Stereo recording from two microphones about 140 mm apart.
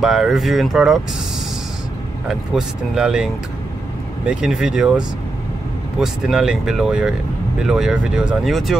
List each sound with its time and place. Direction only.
0.0 s speech: 5° right (ahead or behind)
2.2 s speech: 5° right (ahead or behind)
4.3 s speech: 5° right (ahead or behind)